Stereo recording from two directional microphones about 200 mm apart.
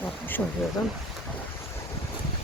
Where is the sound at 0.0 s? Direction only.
10° left (ahead or behind).